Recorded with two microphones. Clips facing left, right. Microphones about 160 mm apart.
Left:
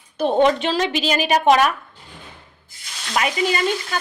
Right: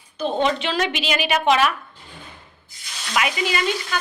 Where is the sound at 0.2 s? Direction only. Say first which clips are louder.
Left 5 dB; 50° left (ahead or behind).